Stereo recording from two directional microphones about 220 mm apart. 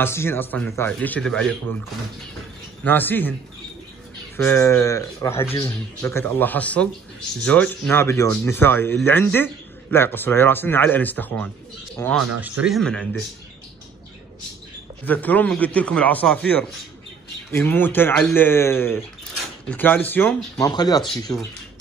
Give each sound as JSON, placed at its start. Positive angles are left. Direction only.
{"t": 0.0, "sound": "speech", "side_deg": 10}
{"t": 2.8, "sound": "speech", "side_deg": 10}
{"t": 4.4, "sound": "speech", "side_deg": 10}
{"t": 15.0, "sound": "speech", "side_deg": 5}